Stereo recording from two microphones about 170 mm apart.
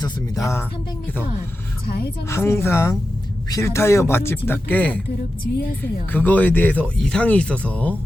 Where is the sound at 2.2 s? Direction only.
15° left (ahead or behind).